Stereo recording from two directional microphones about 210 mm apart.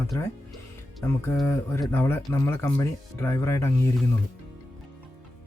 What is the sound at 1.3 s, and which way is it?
Speech, 10° left (ahead or behind).